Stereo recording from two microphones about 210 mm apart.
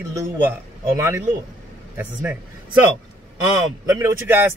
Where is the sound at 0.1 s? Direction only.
10° right (ahead or behind).